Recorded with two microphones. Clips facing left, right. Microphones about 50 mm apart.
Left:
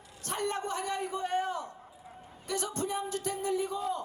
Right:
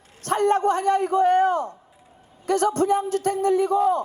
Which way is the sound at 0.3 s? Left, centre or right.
Right.